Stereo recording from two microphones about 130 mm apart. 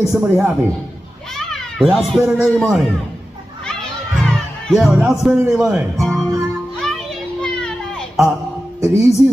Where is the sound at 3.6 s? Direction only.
5° left (ahead or behind).